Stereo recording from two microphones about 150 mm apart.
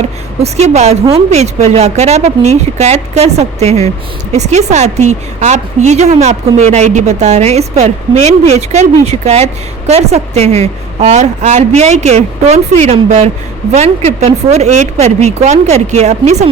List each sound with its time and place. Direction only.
0.4 s a woman's voice: 45° right (ahead or behind)